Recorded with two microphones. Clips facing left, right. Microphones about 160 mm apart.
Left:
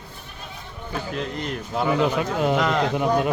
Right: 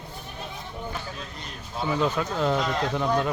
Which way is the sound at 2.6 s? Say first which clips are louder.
Left 5 dB; 80° left.